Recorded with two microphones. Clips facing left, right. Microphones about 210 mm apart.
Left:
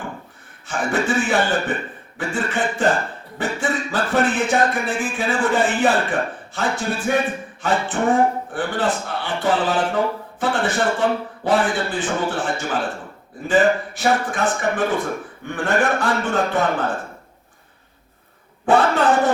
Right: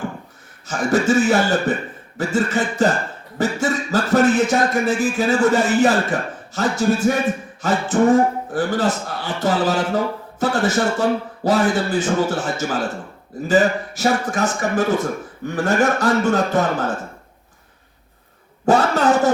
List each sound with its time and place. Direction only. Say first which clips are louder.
0.7 s speech: right 4 dB; 40° right (ahead or behind)
18.6 s speech: right 1 dB; 40° right (ahead or behind)